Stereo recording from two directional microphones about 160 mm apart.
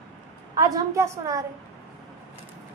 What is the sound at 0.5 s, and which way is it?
Speech, 20° right (ahead or behind).